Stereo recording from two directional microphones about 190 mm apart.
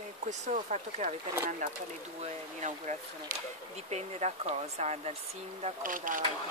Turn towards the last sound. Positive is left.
turn(degrees=-45)  # may be behind; listen again after turning